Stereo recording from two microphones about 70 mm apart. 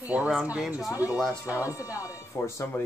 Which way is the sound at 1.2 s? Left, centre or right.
Centre.